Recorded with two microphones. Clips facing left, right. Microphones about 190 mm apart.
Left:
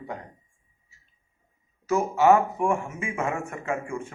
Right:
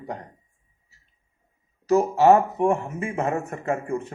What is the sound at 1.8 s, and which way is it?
A man's voice, 35° right (ahead or behind).